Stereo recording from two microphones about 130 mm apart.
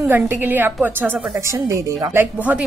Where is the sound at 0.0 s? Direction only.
15° right (ahead or behind).